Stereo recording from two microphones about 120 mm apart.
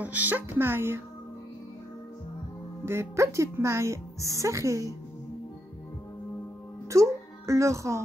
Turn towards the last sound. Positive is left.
turn(degrees=-25)  # may be behind; listen again after turning